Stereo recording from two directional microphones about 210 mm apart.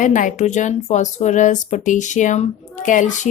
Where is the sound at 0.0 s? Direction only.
35° left (ahead or behind).